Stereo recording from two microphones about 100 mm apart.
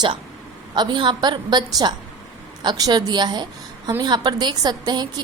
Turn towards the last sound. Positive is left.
turn(degrees=-45)  # may be behind; listen again after turning